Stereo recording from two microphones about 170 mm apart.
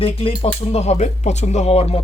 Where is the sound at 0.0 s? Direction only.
35° left (ahead or behind).